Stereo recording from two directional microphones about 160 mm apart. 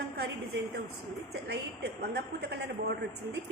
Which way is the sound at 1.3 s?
90° right.